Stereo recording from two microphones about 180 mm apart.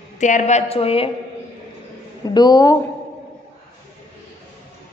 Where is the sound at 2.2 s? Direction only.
20° left (ahead or behind).